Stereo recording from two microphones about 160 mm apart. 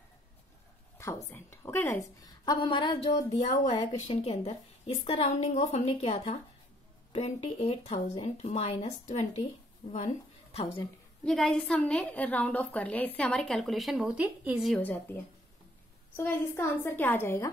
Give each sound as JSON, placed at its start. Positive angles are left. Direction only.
{"t": 1.3, "sound": "a woman's voice", "side_deg": 15}
{"t": 3.2, "sound": "a woman's voice", "side_deg": 20}
{"t": 4.1, "sound": "a woman's voice", "side_deg": 40}
{"t": 11.2, "sound": "a woman's voice", "side_deg": 5}
{"t": 14.7, "sound": "a woman's voice", "side_deg": 10}
{"t": 16.2, "sound": "a woman's voice", "side_deg": 15}